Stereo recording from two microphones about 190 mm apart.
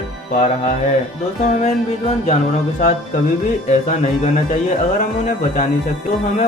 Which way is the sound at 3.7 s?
35° left (ahead or behind).